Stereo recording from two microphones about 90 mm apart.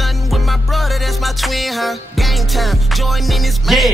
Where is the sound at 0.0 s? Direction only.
Centre (ahead or behind).